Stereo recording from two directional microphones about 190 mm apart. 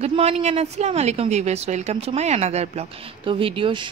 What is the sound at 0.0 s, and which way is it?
Speech, 35° right (ahead or behind).